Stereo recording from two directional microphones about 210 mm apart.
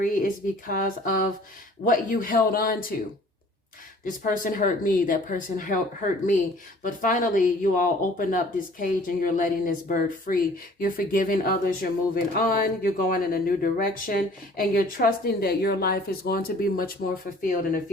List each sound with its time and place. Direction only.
0.0 s speech: 40° left (ahead or behind)
4.0 s speech: 40° left (ahead or behind)